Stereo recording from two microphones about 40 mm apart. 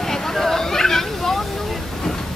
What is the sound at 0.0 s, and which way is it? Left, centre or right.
Hubbub, centre.